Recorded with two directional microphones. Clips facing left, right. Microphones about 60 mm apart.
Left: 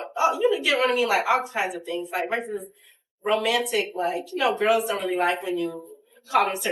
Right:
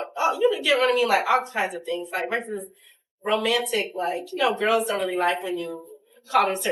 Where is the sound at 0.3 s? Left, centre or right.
Left.